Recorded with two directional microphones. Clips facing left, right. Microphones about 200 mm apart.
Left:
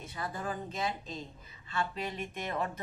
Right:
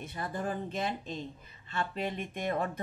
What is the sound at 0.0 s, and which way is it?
Speech, 55° right (ahead or behind).